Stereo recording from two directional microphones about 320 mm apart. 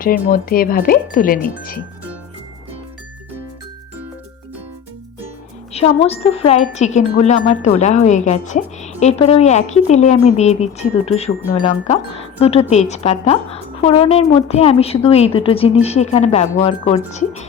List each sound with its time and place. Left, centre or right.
0.0 s speech: left
5.7 s speech: centre